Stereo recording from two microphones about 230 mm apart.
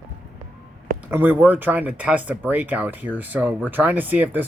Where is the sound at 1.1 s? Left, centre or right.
Centre.